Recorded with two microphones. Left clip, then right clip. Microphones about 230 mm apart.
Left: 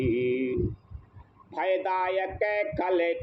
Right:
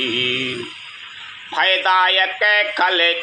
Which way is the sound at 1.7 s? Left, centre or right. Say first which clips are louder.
Right 11 dB; right.